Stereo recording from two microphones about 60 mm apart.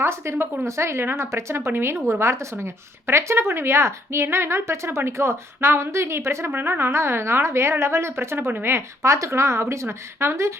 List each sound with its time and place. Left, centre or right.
0.0 s speech: right